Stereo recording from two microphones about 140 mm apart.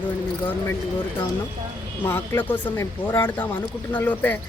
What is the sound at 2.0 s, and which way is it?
Speech, 15° left (ahead or behind).